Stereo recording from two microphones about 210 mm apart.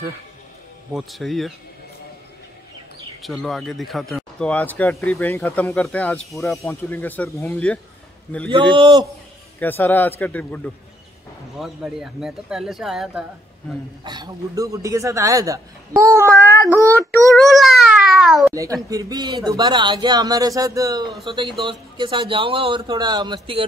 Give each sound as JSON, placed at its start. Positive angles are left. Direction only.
{"t": 0.9, "sound": "speech", "side_deg": 0}
{"t": 3.2, "sound": "speech", "side_deg": 0}
{"t": 6.6, "sound": "speech", "side_deg": 10}
{"t": 8.5, "sound": "speech", "side_deg": -25}
{"t": 9.6, "sound": "speech", "side_deg": 10}
{"t": 14.0, "sound": "a man's voice", "side_deg": -20}
{"t": 17.4, "sound": "a sound", "side_deg": 0}
{"t": 18.5, "sound": "speech", "side_deg": -15}